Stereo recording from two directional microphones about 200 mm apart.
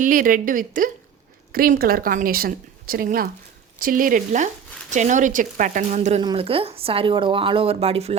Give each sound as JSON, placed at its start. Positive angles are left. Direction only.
{"t": 0.0, "sound": "a woman's voice", "side_deg": -45}